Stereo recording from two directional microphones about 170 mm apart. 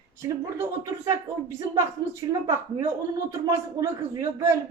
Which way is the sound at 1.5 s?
15° right (ahead or behind).